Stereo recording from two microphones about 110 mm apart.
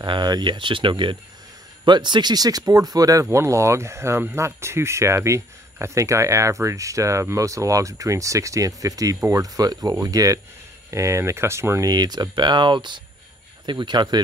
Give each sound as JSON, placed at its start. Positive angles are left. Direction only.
{"t": 0.0, "sound": "speech", "side_deg": -45}